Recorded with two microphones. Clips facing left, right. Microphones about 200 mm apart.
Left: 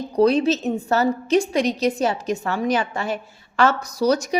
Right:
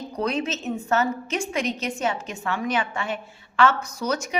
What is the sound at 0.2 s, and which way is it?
A woman's voice, 35° left (ahead or behind).